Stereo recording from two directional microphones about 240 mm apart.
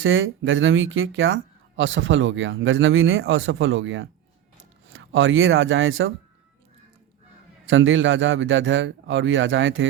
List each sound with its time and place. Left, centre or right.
0.0 s speech: right
7.7 s speech: right